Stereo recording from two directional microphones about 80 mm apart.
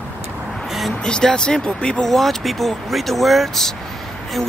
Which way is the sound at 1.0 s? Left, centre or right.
Centre.